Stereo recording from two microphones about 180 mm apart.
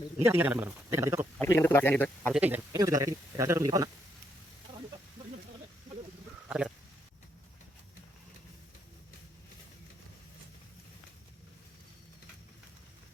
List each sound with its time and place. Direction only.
0.3 s speech: 10° right (ahead or behind)
1.4 s speech: 10° left (ahead or behind)
2.3 s speech: 10° right (ahead or behind)
2.7 s a man's voice: 20° right (ahead or behind)
6.5 s a sound: 5° right (ahead or behind)